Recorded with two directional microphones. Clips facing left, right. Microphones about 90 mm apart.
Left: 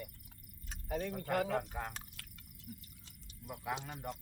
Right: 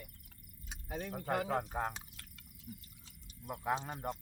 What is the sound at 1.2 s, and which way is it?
Speech, 30° right (ahead or behind).